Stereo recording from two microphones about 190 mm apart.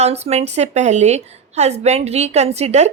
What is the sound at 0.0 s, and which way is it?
A woman's voice, 35° right (ahead or behind).